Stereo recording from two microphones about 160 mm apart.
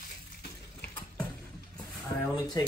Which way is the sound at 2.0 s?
20° left (ahead or behind).